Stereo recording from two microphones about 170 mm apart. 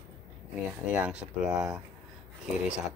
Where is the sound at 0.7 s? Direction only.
5° right (ahead or behind).